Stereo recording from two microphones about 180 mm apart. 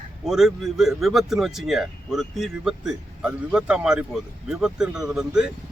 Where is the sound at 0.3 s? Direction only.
Centre (ahead or behind).